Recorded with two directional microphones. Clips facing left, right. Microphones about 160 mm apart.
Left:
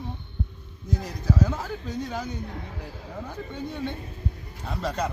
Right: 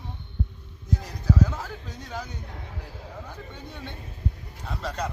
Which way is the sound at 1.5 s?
15° left (ahead or behind).